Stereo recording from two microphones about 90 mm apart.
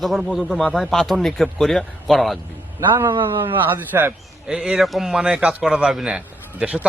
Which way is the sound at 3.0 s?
65° right (ahead or behind).